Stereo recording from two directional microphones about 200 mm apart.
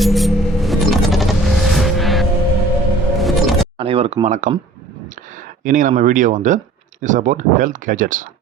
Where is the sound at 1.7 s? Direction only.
Centre (ahead or behind).